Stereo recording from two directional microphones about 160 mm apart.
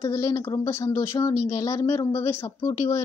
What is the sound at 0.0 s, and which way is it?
Speech, 15° left (ahead or behind).